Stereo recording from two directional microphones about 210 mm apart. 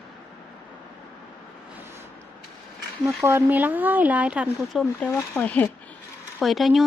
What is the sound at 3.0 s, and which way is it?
Speech, 10° right (ahead or behind).